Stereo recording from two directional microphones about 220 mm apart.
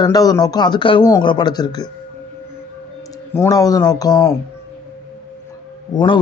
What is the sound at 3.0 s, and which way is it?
Speech, 15° left (ahead or behind).